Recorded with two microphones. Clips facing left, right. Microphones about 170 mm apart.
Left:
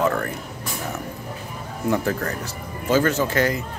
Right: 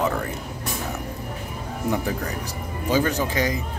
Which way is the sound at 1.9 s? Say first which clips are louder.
Left 4 dB; 15° right (ahead or behind).